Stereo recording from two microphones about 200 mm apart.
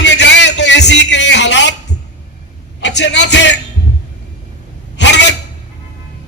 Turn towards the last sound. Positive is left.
turn(degrees=60)  # may be behind; listen again after turning